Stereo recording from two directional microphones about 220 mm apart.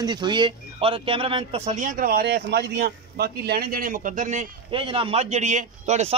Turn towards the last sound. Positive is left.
turn(degrees=-30)  # may be behind; listen again after turning